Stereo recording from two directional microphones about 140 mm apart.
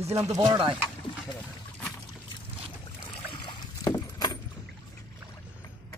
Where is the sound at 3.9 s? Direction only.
30° left (ahead or behind).